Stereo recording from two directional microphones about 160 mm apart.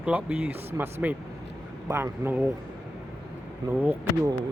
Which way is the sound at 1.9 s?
15° right (ahead or behind).